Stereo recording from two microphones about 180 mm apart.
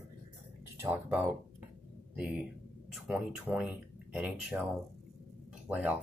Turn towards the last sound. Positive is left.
turn(degrees=-5)  # may be behind; listen again after turning